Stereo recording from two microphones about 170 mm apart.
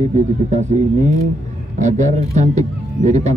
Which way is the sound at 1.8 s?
45° right (ahead or behind).